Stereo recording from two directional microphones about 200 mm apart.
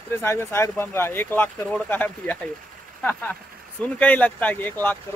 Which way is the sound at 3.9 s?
10° left (ahead or behind).